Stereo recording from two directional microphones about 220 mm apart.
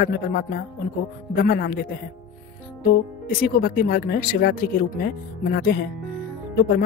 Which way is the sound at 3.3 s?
40° left (ahead or behind).